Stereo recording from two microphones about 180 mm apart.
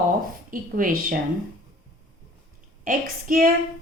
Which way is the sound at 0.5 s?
50° right (ahead or behind).